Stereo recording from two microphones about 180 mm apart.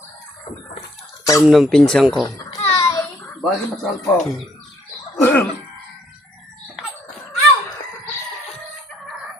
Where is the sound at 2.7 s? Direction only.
15° left (ahead or behind).